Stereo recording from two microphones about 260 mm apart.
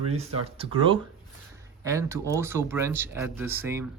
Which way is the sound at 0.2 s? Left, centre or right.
Right.